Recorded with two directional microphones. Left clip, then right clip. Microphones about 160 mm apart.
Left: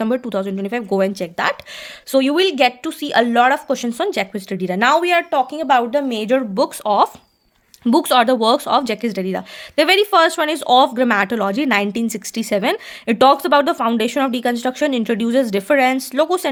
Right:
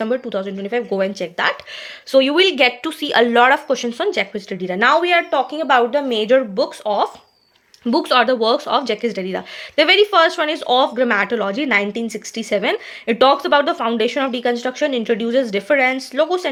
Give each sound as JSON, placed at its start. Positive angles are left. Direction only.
{"t": 0.0, "sound": "speech", "side_deg": 45}
{"t": 6.6, "sound": "speech", "side_deg": 55}
{"t": 7.9, "sound": "speech", "side_deg": 40}